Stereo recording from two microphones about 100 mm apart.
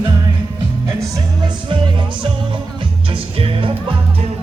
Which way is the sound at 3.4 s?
60° right (ahead or behind).